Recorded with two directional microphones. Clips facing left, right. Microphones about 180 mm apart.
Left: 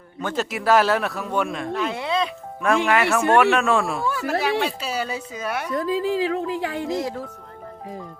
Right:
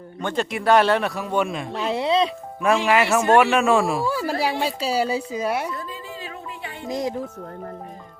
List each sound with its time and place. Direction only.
0.2 s speech: 5° left (ahead or behind)
1.7 s a sound: 25° right (ahead or behind)
2.6 s speech: 5° right (ahead or behind)
4.0 s speech: 30° right (ahead or behind)
5.7 s speech: 90° left
6.8 s speech: 20° right (ahead or behind)